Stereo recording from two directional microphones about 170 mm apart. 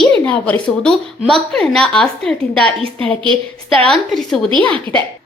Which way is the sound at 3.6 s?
Centre (ahead or behind).